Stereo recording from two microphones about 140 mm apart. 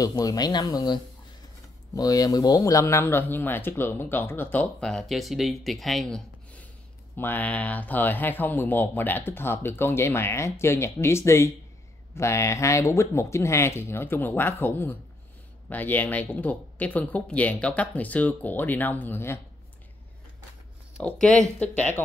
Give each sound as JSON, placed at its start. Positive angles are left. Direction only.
{"t": 0.0, "sound": "speech", "side_deg": 25}
{"t": 21.0, "sound": "speech", "side_deg": 5}